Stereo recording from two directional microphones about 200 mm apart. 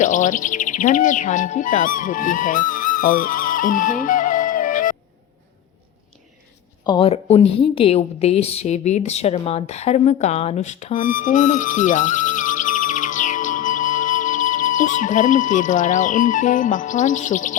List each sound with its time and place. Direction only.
0.0 s speech: 40° left (ahead or behind)
6.8 s a woman's voice: 25° left (ahead or behind)